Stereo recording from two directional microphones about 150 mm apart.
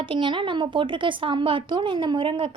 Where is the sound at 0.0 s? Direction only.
35° right (ahead or behind).